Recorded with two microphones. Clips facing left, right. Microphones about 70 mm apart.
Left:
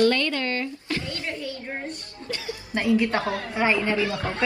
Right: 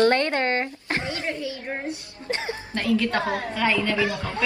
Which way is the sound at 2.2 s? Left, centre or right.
Right.